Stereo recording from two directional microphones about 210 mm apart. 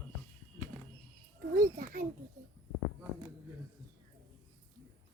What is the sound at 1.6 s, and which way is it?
Speech, 45° right (ahead or behind).